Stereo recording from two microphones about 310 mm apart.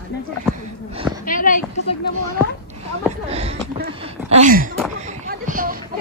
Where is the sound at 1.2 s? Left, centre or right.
Left.